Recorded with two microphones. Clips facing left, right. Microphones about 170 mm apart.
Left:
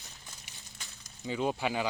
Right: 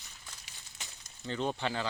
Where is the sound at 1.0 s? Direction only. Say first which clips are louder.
Left 2 dB; 10° left (ahead or behind).